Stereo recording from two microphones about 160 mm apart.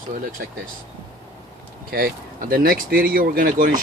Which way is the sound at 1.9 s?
65° right (ahead or behind).